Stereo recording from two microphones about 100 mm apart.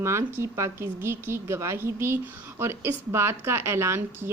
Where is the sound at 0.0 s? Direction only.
30° right (ahead or behind).